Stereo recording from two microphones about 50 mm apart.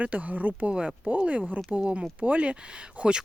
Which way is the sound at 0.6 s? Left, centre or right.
Centre.